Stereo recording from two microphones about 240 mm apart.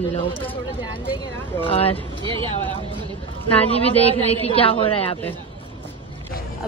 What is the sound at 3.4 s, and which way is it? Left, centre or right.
A woman's voice, left.